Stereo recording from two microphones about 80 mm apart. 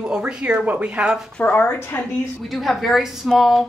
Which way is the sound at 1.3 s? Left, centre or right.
Left.